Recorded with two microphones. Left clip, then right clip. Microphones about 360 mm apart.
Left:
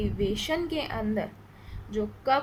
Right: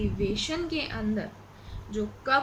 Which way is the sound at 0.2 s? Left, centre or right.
Centre.